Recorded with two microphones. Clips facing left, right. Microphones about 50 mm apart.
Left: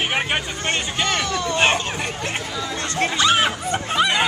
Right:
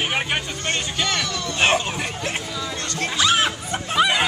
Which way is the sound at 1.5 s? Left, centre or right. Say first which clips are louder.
Right 1 dB; centre.